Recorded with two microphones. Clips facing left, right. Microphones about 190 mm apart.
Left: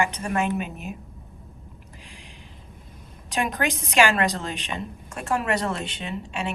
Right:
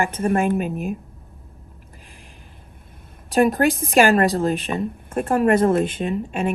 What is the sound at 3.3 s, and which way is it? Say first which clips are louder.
A woman's voice: right 9 dB; 50° right (ahead or behind).